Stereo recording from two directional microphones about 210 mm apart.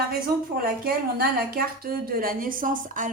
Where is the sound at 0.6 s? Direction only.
45° right (ahead or behind).